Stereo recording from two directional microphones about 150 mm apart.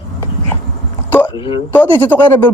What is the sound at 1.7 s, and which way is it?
Speech, 10° left (ahead or behind).